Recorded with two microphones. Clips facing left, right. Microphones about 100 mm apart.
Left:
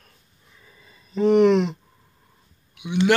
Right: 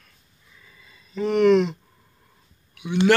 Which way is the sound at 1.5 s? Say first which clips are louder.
Right 2 dB; centre (ahead or behind).